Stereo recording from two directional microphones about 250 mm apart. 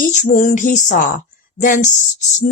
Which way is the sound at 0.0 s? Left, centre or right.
Left.